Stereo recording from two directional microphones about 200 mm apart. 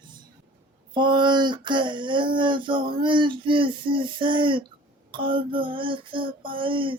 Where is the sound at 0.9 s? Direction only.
25° right (ahead or behind).